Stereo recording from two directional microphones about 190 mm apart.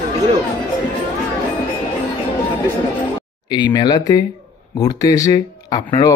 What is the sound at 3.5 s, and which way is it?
Speech, 25° left (ahead or behind).